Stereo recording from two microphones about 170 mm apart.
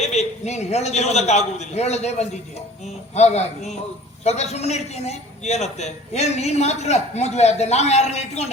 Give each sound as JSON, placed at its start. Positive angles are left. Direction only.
{"t": 0.0, "sound": "a man's voice", "side_deg": 40}